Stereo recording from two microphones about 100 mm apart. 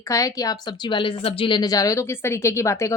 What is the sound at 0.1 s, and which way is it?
Speech, 35° left (ahead or behind).